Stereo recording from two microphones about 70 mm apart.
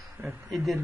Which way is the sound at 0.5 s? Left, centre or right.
Centre.